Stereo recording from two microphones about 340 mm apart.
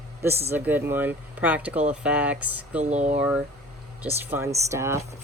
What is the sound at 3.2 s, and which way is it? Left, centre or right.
Speech, centre.